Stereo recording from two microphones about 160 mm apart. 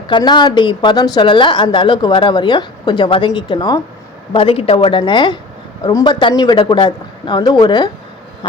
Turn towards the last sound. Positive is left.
turn(degrees=25)  # may be behind; listen again after turning